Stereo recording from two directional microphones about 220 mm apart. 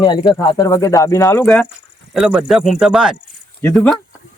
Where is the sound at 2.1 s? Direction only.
5° right (ahead or behind).